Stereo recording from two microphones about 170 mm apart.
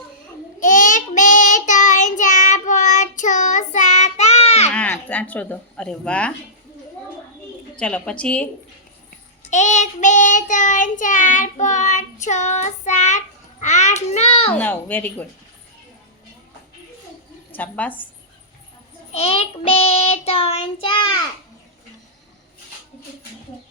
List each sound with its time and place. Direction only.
0.6 s child singing: 50° left (ahead or behind)
4.7 s speech: 10° left (ahead or behind)
7.8 s speech: 5° left (ahead or behind)
9.5 s child singing: 45° left (ahead or behind)
14.5 s speech: 10° left (ahead or behind)
17.5 s speech: 10° left (ahead or behind)
19.1 s child singing: 35° left (ahead or behind)